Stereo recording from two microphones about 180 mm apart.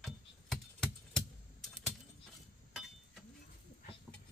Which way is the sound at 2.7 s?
Centre (ahead or behind).